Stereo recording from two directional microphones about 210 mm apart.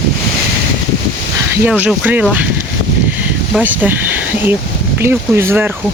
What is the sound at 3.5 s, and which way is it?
Speech, 5° right (ahead or behind).